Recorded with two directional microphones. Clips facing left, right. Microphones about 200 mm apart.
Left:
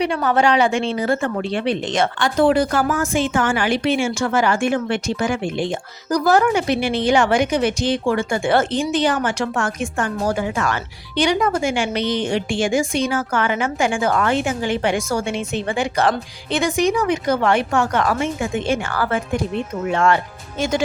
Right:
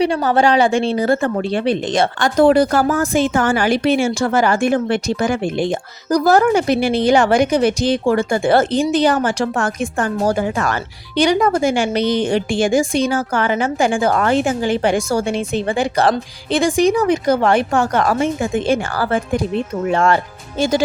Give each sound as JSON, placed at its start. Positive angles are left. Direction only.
{"t": 0.0, "sound": "a woman's voice", "side_deg": -35}